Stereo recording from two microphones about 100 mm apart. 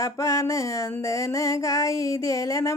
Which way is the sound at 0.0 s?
35° left (ahead or behind).